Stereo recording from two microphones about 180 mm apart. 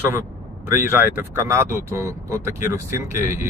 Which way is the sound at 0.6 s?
15° right (ahead or behind).